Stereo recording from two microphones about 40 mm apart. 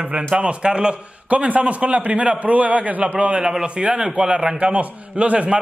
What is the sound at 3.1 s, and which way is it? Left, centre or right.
A man's voice, right.